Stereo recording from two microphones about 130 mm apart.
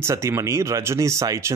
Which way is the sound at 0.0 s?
20° right (ahead or behind).